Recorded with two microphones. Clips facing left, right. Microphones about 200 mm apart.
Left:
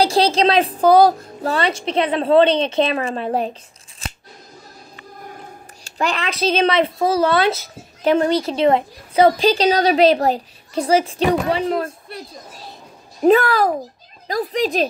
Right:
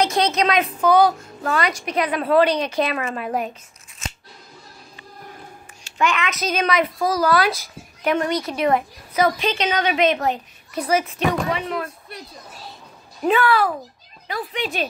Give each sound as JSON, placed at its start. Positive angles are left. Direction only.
{"t": 0.0, "sound": "speech", "side_deg": 30}
{"t": 4.0, "sound": "scissors", "side_deg": 35}
{"t": 5.9, "sound": "speech", "side_deg": 35}
{"t": 13.2, "sound": "speech", "side_deg": 40}